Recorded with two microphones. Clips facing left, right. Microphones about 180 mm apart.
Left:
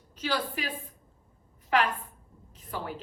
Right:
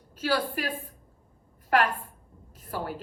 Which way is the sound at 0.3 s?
50° right (ahead or behind).